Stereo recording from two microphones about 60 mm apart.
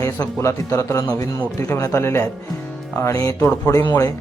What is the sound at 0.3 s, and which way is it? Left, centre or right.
A man's voice, left.